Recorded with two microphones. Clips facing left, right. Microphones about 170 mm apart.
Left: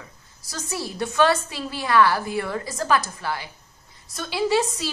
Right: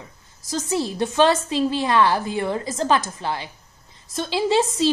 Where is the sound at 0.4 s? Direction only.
20° right (ahead or behind).